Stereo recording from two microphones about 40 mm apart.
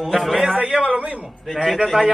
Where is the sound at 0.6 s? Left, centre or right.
Right.